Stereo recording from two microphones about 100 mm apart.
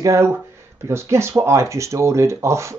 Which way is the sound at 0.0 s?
30° right (ahead or behind).